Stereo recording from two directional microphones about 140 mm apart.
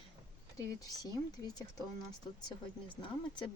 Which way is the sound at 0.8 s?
25° left (ahead or behind).